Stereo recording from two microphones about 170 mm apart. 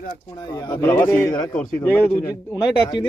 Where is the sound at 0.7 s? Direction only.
15° left (ahead or behind).